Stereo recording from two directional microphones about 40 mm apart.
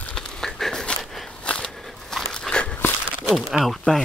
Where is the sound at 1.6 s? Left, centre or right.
Centre.